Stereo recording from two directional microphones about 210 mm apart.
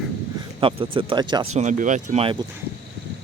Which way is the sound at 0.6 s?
25° right (ahead or behind).